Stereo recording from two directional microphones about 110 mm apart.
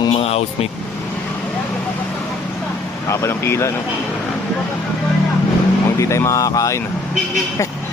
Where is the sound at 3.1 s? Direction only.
25° left (ahead or behind).